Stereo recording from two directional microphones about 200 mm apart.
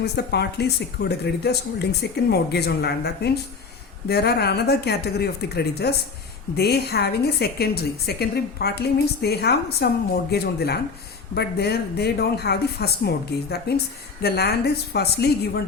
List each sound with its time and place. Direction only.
0.0 s a woman's voice: 55° left (ahead or behind)